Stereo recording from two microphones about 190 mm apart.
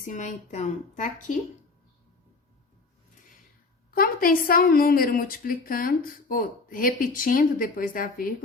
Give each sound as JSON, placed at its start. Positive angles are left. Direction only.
{"t": 0.1, "sound": "a woman's voice", "side_deg": 40}
{"t": 3.9, "sound": "a woman's voice", "side_deg": 50}